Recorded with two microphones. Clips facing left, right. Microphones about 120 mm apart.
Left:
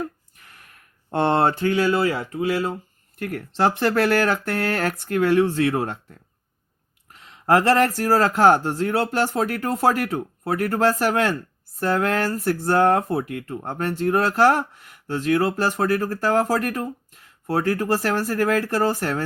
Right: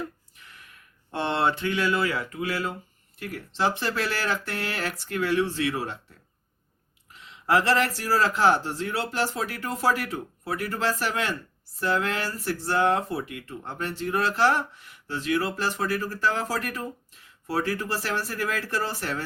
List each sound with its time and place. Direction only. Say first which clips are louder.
0.0 s a sound: left 5 dB; 45° left (ahead or behind)
1.1 s speech: left 6 dB; 50° left (ahead or behind); by 2.7 s 30° left (ahead or behind)
3.2 s speech: left 6 dB; 55° left (ahead or behind)
7.1 s speech: left 5 dB; 45° left (ahead or behind)